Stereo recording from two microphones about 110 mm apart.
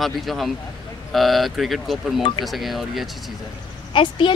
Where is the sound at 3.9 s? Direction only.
50° left (ahead or behind).